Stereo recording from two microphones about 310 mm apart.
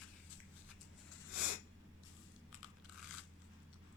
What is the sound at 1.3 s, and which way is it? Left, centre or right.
Snort, left.